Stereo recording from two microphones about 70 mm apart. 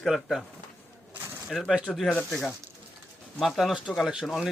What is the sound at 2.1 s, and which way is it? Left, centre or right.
Speech, left.